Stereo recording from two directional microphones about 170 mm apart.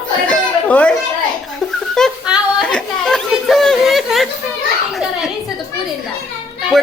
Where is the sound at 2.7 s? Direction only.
5° left (ahead or behind).